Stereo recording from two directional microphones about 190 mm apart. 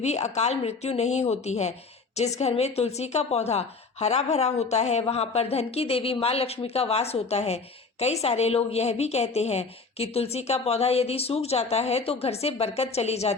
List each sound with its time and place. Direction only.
0.0 s a woman's voice: 35° left (ahead or behind)